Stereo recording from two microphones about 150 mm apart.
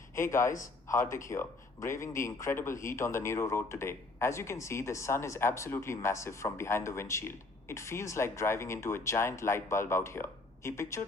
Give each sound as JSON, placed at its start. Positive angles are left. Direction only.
{"t": 0.1, "sound": "a man's voice", "side_deg": 20}